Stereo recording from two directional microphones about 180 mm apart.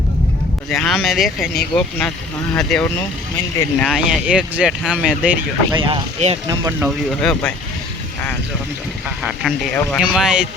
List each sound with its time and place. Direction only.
0.7 s speech: centre (ahead or behind)
5.7 s speech: 25° right (ahead or behind)
6.1 s speech: 40° right (ahead or behind)
6.7 s speech: 10° right (ahead or behind)
7.2 s speech: 5° left (ahead or behind)
9.7 s speech: centre (ahead or behind)